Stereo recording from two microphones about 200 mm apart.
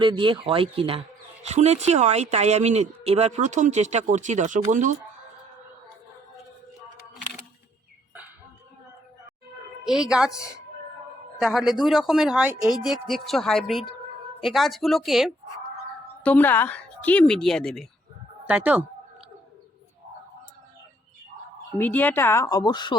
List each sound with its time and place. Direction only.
0.0 s speech: 25° right (ahead or behind)
9.8 s speech: 5° right (ahead or behind)
11.3 s a woman's voice: centre (ahead or behind)
21.8 s a woman's voice: 10° left (ahead or behind)